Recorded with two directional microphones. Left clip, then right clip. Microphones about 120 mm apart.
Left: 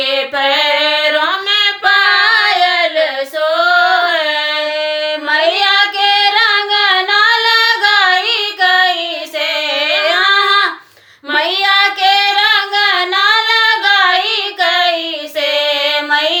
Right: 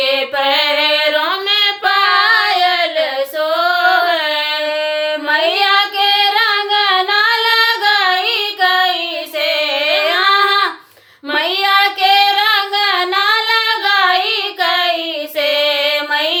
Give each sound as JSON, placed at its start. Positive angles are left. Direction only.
{"t": 0.0, "sound": "female singing", "side_deg": 5}
{"t": 0.4, "sound": "female singing", "side_deg": -45}
{"t": 2.2, "sound": "child singing", "side_deg": 5}
{"t": 3.8, "sound": "a sound", "side_deg": 10}
{"t": 5.3, "sound": "female singing", "side_deg": 10}
{"t": 10.0, "sound": "child singing", "side_deg": 5}
{"t": 15.4, "sound": "music", "side_deg": 10}